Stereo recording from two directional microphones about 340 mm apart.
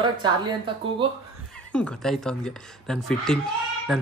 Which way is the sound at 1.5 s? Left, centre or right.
Centre.